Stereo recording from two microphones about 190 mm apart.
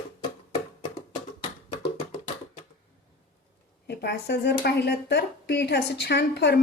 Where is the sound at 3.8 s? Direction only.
60° left (ahead or behind).